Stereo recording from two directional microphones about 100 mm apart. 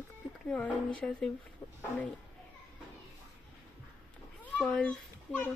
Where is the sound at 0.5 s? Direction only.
10° left (ahead or behind).